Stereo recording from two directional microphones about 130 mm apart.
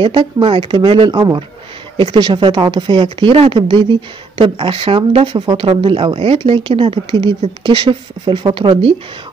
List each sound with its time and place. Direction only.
0.0 s speech: 40° right (ahead or behind)